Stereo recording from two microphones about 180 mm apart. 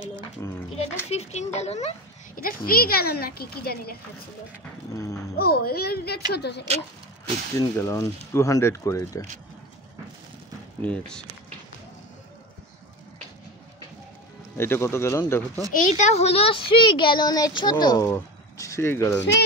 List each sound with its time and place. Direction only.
0.4 s goat: 15° left (ahead or behind)
1.1 s speech: 40° left (ahead or behind)
2.4 s a woman's voice: 55° left (ahead or behind)
4.9 s speech: 15° left (ahead or behind)
5.3 s a woman's voice: 60° left (ahead or behind)
7.5 s speech: 15° left (ahead or behind)
10.8 s speech: 5° left (ahead or behind)
14.6 s speech: 15° left (ahead or behind)
15.7 s speech: 45° left (ahead or behind); by 19.1 s 15° left (ahead or behind)